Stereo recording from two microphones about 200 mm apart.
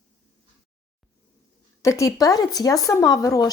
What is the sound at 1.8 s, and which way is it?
Speech, 15° left (ahead or behind).